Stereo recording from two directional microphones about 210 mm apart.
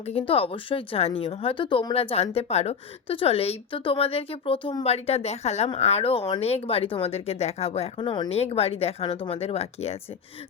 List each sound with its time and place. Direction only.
0.0 s speech: 30° left (ahead or behind)